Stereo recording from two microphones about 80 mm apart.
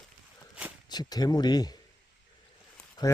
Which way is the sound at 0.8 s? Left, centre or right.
Left.